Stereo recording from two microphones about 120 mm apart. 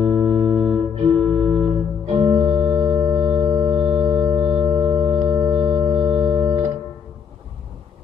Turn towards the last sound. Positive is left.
turn(degrees=-40)  # may be behind; listen again after turning